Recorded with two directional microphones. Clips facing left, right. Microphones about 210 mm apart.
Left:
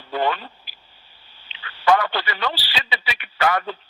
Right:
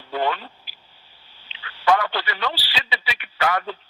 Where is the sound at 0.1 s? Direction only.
50° left (ahead or behind).